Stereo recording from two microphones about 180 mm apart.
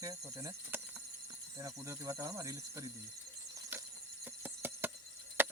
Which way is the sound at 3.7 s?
10° right (ahead or behind).